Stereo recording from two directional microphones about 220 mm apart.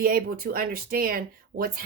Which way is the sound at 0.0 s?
40° right (ahead or behind).